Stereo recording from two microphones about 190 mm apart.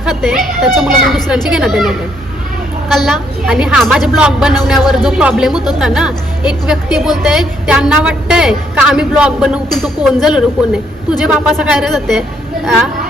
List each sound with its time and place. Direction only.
0.0 s a woman's voice: centre (ahead or behind)
2.9 s a woman's voice: centre (ahead or behind)